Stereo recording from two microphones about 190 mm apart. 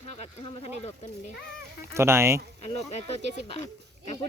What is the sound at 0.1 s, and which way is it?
Speech, 30° left (ahead or behind).